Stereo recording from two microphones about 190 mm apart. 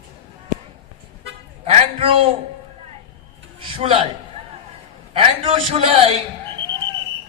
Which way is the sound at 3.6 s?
30° right (ahead or behind).